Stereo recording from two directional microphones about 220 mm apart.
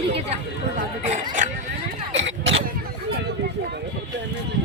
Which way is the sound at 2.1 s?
55° right (ahead or behind).